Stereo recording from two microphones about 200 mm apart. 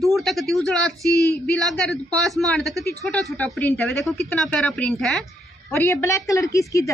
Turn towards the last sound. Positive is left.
turn(degrees=15)  # may be behind; listen again after turning